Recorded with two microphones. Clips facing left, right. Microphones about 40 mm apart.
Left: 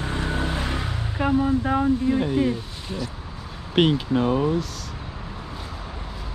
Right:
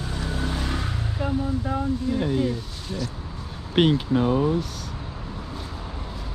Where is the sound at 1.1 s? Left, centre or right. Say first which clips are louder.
Left 6 dB; left.